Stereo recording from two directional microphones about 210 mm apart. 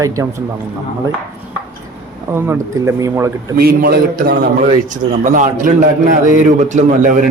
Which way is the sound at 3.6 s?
45° right (ahead or behind).